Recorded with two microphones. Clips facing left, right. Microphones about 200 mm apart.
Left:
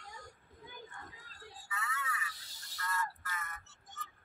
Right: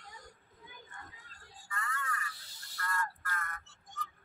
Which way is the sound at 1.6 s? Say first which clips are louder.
Right 1 dB; 5° left (ahead or behind).